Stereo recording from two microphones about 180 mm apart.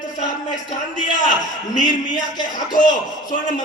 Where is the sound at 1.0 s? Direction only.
45° left (ahead or behind).